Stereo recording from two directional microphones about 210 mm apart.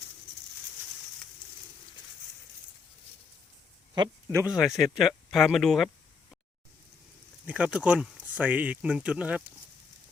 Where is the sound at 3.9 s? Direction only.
20° right (ahead or behind).